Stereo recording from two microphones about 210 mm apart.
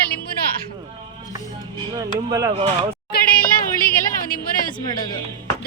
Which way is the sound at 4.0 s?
45° left (ahead or behind).